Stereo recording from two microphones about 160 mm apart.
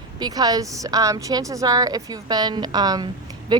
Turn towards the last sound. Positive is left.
turn(degrees=-25)  # may be behind; listen again after turning